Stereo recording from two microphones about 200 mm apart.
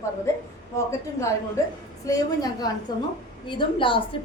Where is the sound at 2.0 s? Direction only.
20° left (ahead or behind).